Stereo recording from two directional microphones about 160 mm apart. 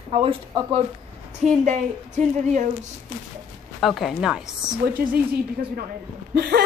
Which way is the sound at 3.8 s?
Centre (ahead or behind).